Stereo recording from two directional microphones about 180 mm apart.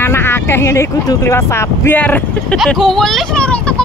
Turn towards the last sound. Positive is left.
turn(degrees=5)  # may be behind; listen again after turning